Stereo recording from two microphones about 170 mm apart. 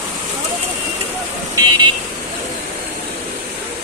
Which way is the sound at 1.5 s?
25° right (ahead or behind).